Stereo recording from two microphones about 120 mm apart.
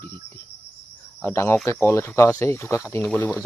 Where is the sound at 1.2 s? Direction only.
20° left (ahead or behind).